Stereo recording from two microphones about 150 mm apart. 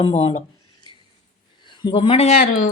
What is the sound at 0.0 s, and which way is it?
Speech, 35° left (ahead or behind).